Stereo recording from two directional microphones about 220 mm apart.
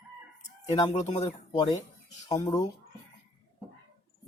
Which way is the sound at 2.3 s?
15° left (ahead or behind).